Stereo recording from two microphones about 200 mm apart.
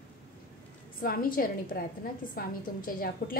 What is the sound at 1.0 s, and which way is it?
A woman's voice, 45° left (ahead or behind).